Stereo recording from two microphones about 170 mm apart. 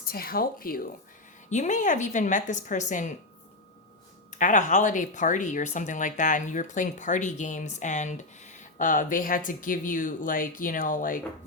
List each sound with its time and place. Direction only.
0.0 s speech: 60° left (ahead or behind)
1.5 s speech: 45° left (ahead or behind)
4.4 s speech: 50° left (ahead or behind)